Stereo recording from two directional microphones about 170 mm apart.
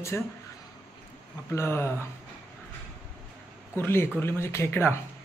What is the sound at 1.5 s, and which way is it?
Speech, 15° left (ahead or behind).